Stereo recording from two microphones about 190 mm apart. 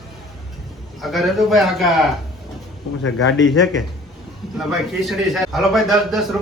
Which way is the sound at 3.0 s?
90° left.